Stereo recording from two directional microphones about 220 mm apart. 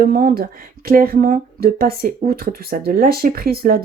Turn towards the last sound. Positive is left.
turn(degrees=-45)  # may be behind; listen again after turning